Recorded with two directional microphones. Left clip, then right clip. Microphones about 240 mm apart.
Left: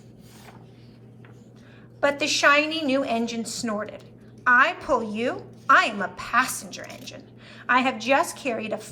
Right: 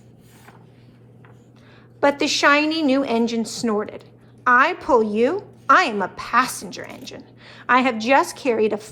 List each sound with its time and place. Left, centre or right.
2.0 s a woman's voice: right